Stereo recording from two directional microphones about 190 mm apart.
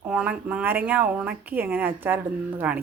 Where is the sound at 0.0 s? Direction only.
5° right (ahead or behind).